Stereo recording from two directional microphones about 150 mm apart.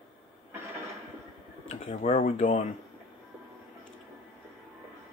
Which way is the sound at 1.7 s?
55° left (ahead or behind).